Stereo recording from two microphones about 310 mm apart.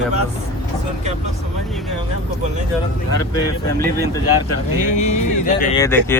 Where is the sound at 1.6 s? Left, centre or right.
Centre.